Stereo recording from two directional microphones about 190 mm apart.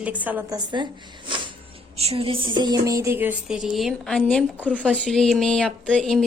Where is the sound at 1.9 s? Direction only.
30° right (ahead or behind).